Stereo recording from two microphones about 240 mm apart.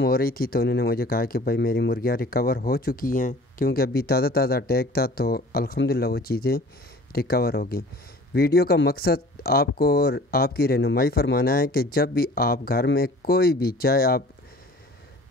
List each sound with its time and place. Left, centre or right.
0.0 s speech: left